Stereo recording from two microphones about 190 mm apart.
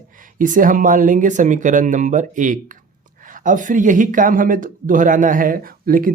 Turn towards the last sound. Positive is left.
turn(degrees=-50)  # may be behind; listen again after turning